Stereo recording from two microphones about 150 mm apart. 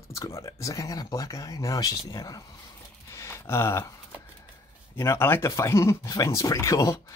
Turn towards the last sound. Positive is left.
turn(degrees=20)  # may be behind; listen again after turning